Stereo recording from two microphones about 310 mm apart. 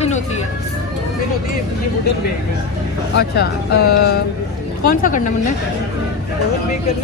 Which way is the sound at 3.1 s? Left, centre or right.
Left.